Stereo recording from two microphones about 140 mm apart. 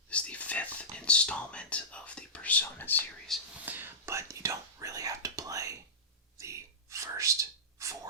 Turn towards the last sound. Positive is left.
turn(degrees=-20)  # may be behind; listen again after turning